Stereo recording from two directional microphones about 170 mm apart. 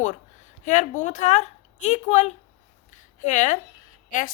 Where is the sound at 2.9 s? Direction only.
45° left (ahead or behind).